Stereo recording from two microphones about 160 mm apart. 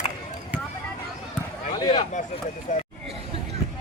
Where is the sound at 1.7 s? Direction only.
35° left (ahead or behind).